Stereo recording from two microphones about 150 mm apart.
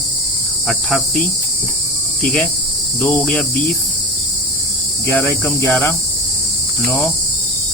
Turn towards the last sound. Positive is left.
turn(degrees=15)  # may be behind; listen again after turning